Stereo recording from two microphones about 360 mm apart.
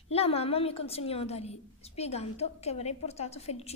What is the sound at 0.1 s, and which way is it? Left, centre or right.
A woman's voice, centre.